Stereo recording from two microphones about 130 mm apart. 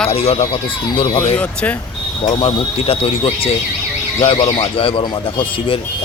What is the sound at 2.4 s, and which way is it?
Speech, 45° left (ahead or behind).